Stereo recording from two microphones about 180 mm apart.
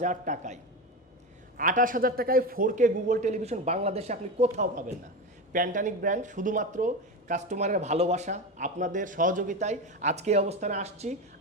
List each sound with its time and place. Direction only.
0.0 s speech: 45° right (ahead or behind)